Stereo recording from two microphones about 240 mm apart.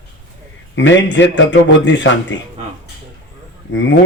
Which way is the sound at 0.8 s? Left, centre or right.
Left.